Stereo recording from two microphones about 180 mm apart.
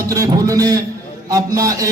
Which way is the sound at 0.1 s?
20° right (ahead or behind).